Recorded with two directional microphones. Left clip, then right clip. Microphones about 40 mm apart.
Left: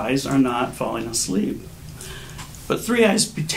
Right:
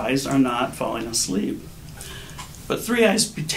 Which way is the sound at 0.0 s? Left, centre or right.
Right.